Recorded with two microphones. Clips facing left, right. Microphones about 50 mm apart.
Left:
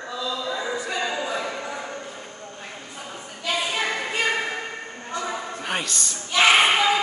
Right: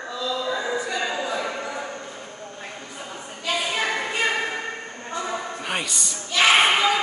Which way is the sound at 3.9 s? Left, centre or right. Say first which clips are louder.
Right 1 dB; centre.